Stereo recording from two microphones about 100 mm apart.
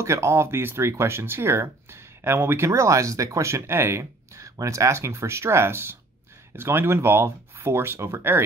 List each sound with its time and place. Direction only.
0.0 s speech: 30° right (ahead or behind)